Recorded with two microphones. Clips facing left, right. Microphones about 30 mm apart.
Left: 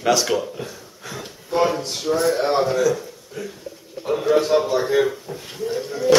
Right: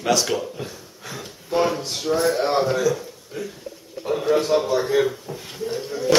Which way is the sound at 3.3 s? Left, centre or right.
Centre.